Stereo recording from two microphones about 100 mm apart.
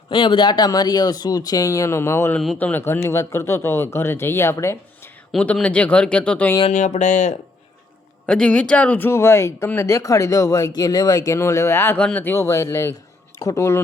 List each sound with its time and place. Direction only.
0.1 s speech: 55° left (ahead or behind); by 5.1 s 30° left (ahead or behind)
5.3 s speech: 5° left (ahead or behind)
6.6 s speech: 90° left
8.3 s speech: 10° left (ahead or behind); by 11.3 s 40° left (ahead or behind)
11.3 s speech: 30° left (ahead or behind)
11.9 s speech: 15° left (ahead or behind); by 13.7 s 30° left (ahead or behind)